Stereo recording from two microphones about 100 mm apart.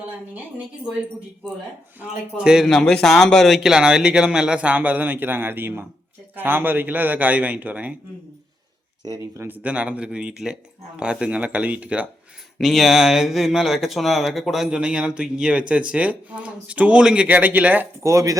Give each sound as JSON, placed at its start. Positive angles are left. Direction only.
{"t": 2.0, "sound": "speech", "side_deg": -10}
{"t": 9.0, "sound": "speech", "side_deg": -35}
{"t": 9.5, "sound": "speech", "side_deg": -15}
{"t": 12.5, "sound": "speech", "side_deg": 0}
{"t": 18.0, "sound": "speech", "side_deg": -35}